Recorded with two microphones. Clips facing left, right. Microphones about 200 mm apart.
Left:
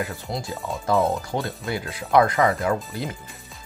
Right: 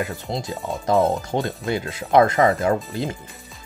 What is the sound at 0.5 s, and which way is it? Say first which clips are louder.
Speech: right 2 dB; centre (ahead or behind).